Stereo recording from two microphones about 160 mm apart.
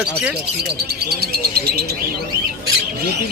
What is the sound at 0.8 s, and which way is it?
Bird, 80° right.